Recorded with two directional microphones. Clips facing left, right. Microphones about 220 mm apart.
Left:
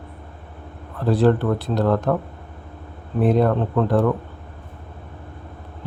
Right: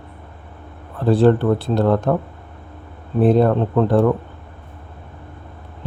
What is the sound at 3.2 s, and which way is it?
Speech, 30° right (ahead or behind).